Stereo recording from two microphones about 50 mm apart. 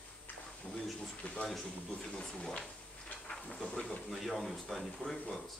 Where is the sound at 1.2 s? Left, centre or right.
Left.